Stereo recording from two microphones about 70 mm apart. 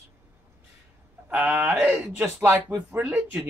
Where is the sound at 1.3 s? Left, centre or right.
Right.